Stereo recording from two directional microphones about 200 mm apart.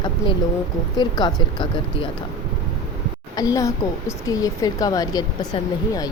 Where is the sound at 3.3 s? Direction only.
15° left (ahead or behind).